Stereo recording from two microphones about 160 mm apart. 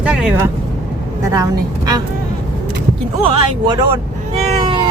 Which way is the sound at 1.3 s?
25° right (ahead or behind).